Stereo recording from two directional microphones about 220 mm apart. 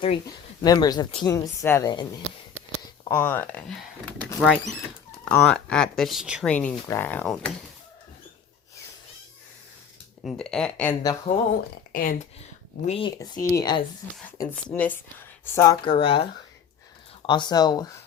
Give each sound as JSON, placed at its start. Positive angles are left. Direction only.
{"t": 0.0, "sound": "speech", "side_deg": 20}
{"t": 3.1, "sound": "speech", "side_deg": 10}
{"t": 4.2, "sound": "a sound", "side_deg": 5}
{"t": 5.2, "sound": "speech", "side_deg": 5}
{"t": 10.2, "sound": "speech", "side_deg": 5}
{"t": 11.9, "sound": "speech", "side_deg": 40}
{"t": 12.9, "sound": "speech", "side_deg": 25}
{"t": 14.3, "sound": "speech", "side_deg": 5}
{"t": 15.5, "sound": "speech", "side_deg": 20}
{"t": 17.2, "sound": "speech", "side_deg": 20}